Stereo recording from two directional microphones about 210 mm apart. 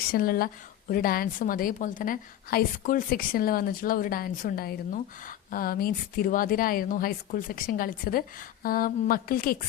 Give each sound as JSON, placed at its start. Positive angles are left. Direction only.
{"t": 0.1, "sound": "a woman's voice", "side_deg": 45}